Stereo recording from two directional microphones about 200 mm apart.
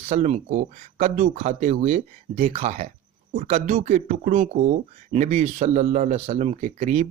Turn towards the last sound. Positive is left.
turn(degrees=-35)  # may be behind; listen again after turning